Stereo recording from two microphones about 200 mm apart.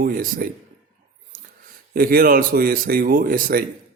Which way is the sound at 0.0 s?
45° right (ahead or behind).